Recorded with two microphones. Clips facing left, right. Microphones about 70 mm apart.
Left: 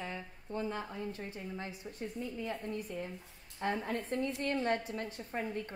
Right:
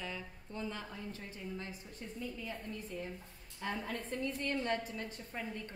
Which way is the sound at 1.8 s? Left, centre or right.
Left.